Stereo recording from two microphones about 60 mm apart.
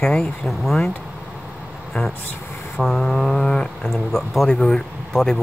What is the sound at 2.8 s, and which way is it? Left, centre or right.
Speech, centre.